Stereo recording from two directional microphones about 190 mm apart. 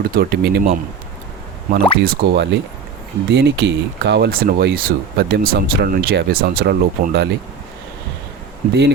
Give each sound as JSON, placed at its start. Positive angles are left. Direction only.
{"t": 0.0, "sound": "speech", "side_deg": -50}
{"t": 1.7, "sound": "speech", "side_deg": -60}